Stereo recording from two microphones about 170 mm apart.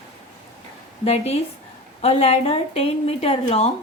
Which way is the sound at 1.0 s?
40° left (ahead or behind).